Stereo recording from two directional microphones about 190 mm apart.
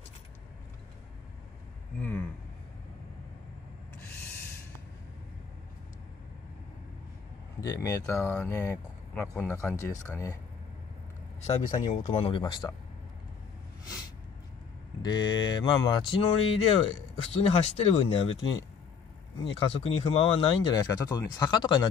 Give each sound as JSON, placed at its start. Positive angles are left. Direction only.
{"t": 2.0, "sound": "a sound", "side_deg": 10}
{"t": 7.6, "sound": "speech", "side_deg": 15}
{"t": 11.4, "sound": "speech", "side_deg": 35}
{"t": 15.0, "sound": "speech", "side_deg": 25}